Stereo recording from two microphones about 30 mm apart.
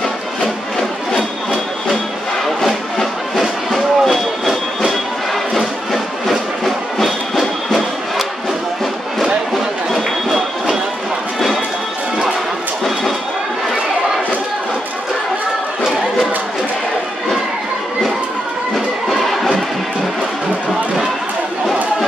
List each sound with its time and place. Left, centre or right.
2.6 s music: centre
6.2 s music: centre
9.9 s a sound: centre